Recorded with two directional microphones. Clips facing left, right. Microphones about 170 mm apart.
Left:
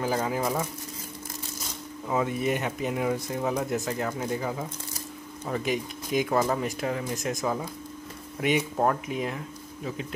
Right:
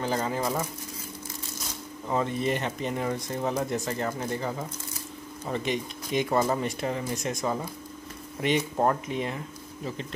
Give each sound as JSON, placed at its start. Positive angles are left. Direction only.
{"t": 0.0, "sound": "speech", "side_deg": 5}
{"t": 2.0, "sound": "speech", "side_deg": 5}